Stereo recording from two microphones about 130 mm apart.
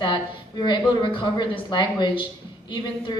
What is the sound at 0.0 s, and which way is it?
A woman's voice, 35° left (ahead or behind).